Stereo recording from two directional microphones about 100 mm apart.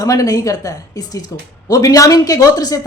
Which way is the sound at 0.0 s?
35° left (ahead or behind).